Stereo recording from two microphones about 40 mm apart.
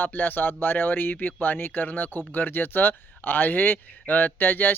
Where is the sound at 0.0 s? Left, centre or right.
Left.